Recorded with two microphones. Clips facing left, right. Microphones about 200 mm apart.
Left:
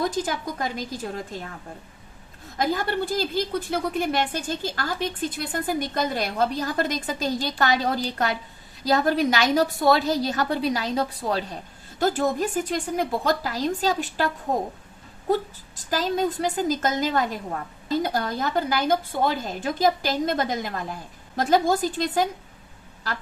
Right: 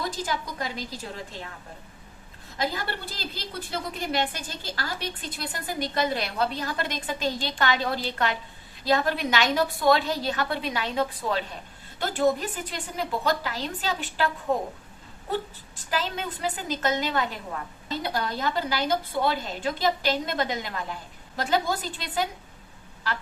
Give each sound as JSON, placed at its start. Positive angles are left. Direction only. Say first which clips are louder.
{"t": 0.0, "sound": "a woman's voice", "louder": "left 5 dB", "side_deg": 50}
{"t": 2.6, "sound": "a woman's voice", "louder": "left 6 dB", "side_deg": 50}
{"t": 15.3, "sound": "a woman's voice", "louder": "left 6 dB", "side_deg": 40}